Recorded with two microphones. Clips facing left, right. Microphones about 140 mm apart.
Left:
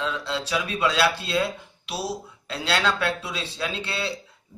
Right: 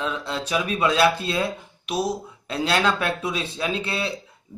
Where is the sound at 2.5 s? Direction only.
20° right (ahead or behind).